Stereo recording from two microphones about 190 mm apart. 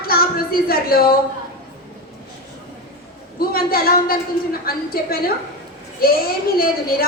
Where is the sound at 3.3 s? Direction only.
50° left (ahead or behind).